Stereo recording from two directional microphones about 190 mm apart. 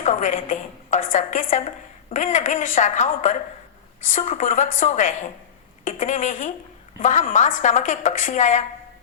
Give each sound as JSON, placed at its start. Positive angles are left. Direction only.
{"t": 0.0, "sound": "a woman's voice", "side_deg": 40}